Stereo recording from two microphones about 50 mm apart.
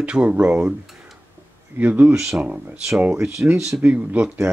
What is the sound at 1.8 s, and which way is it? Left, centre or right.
Speech, right.